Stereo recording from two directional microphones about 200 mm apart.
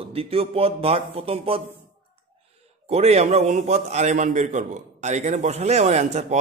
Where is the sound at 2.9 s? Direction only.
30° right (ahead or behind).